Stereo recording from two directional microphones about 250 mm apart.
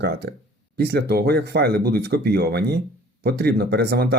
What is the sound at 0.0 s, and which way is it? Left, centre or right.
Speech, right.